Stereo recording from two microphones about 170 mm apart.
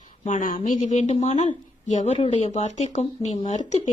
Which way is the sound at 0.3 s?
45° left (ahead or behind).